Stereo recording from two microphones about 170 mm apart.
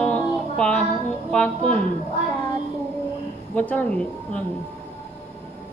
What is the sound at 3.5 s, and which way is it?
Speech, 10° left (ahead or behind).